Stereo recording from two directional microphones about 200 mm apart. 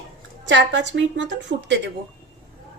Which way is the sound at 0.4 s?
65° right (ahead or behind).